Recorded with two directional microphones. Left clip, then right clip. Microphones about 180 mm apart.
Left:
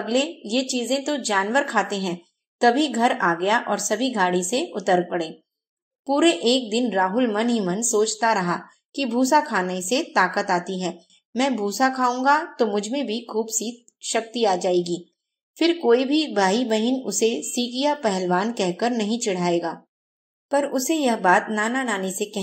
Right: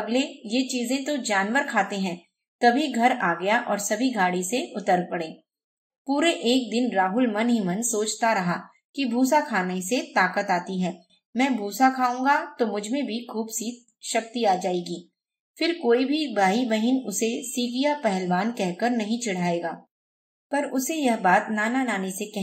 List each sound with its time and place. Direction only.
0.0 s a woman's voice: 30° left (ahead or behind)